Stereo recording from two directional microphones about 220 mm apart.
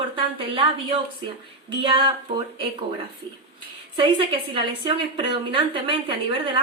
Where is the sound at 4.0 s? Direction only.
25° right (ahead or behind).